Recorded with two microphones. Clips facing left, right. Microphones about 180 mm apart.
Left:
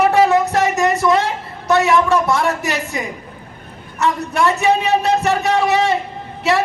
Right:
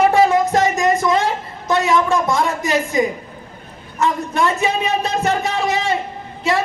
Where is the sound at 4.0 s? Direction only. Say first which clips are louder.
Left 1 dB; 70° left (ahead or behind).